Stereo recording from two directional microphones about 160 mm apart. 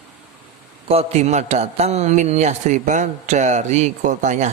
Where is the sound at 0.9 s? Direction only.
40° right (ahead or behind).